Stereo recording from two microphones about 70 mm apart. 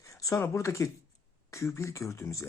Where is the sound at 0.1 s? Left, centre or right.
Left.